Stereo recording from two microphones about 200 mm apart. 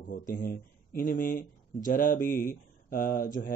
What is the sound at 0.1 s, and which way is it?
Speech, 45° left (ahead or behind).